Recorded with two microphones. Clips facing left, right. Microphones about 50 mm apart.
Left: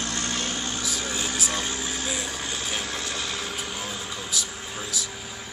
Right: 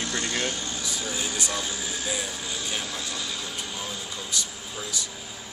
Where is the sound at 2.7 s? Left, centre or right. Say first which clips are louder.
Left 2 dB; left.